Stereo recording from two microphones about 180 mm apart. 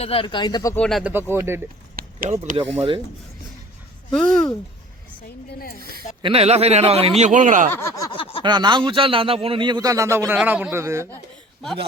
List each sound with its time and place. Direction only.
0.0 s speech: 30° left (ahead or behind)
0.8 s speech: centre (ahead or behind)
1.1 s speech: 15° right (ahead or behind)
2.0 s run: 55° right (ahead or behind)
2.3 s a man's voice: 40° right (ahead or behind)
4.1 s speech: 5° left (ahead or behind)
5.5 s a woman's voice: 60° left (ahead or behind)
6.2 s a man's voice: 35° right (ahead or behind)
7.2 s speech: 45° right (ahead or behind)
7.7 s a sound: 15° left (ahead or behind); by 8.4 s 30° left (ahead or behind)
8.4 s speech: 25° right (ahead or behind)